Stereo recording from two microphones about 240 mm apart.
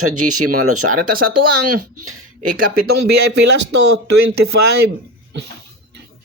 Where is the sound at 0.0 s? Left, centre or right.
Right.